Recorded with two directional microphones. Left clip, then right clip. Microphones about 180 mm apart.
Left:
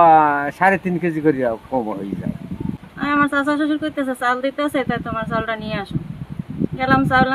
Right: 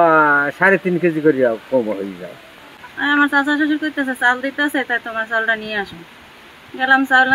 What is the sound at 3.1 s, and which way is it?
Speech, 30° left (ahead or behind).